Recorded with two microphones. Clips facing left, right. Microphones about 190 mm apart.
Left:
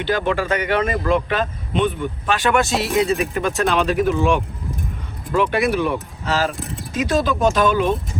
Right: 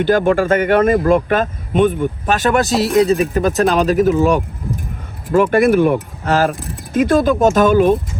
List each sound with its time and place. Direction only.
0.0 s speech: 50° right (ahead or behind)